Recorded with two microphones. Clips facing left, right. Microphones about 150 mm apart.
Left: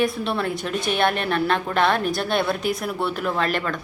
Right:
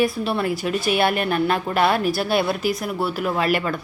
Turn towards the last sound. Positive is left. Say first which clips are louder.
# right 2 dB
turn(degrees=-10)  # may be behind; listen again after turning